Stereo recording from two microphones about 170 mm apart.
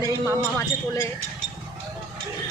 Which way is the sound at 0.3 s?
15° left (ahead or behind).